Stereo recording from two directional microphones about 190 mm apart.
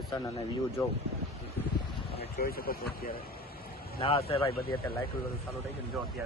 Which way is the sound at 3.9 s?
30° left (ahead or behind).